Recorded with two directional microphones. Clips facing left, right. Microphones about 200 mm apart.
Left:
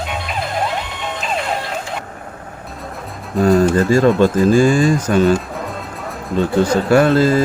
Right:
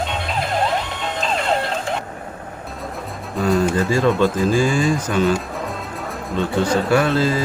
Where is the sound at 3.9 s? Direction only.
45° left (ahead or behind).